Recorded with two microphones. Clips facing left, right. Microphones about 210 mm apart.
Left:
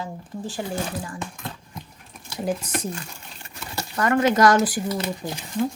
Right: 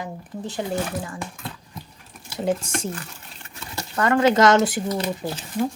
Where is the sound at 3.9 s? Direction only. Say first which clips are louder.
Right 2 dB; 30° right (ahead or behind).